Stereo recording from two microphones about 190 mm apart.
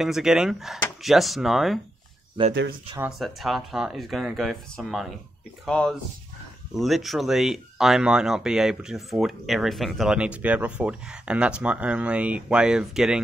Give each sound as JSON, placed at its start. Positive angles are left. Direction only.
{"t": 0.0, "sound": "speech", "side_deg": 0}
{"t": 2.4, "sound": "speech", "side_deg": -25}
{"t": 3.0, "sound": "speech", "side_deg": 0}